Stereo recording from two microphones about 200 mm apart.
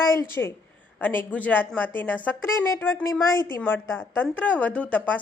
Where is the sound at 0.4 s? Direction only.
10° left (ahead or behind).